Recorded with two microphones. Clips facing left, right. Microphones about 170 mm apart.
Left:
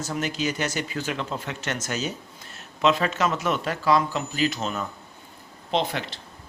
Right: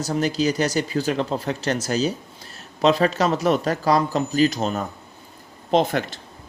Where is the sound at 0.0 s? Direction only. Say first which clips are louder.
Right 6 dB; 35° right (ahead or behind).